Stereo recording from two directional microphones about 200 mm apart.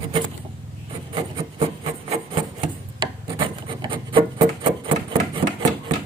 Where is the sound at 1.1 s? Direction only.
30° right (ahead or behind).